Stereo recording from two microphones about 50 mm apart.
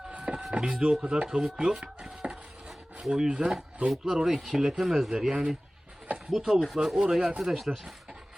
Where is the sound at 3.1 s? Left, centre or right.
Centre.